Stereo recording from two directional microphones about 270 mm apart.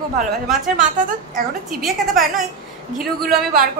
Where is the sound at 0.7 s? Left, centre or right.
Right.